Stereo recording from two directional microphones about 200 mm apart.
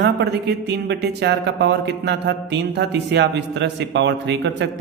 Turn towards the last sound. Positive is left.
turn(degrees=-60)  # may be behind; listen again after turning